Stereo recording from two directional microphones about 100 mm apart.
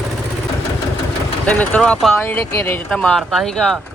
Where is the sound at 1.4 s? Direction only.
15° left (ahead or behind).